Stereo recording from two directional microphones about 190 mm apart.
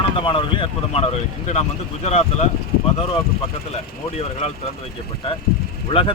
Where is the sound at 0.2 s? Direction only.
25° left (ahead or behind).